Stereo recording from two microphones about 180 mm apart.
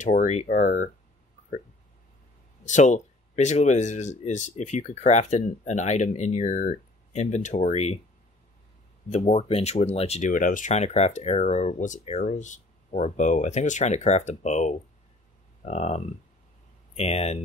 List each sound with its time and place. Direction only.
0.0 s speech: 45° left (ahead or behind)
2.6 s speech: 40° left (ahead or behind)
9.1 s speech: 40° left (ahead or behind)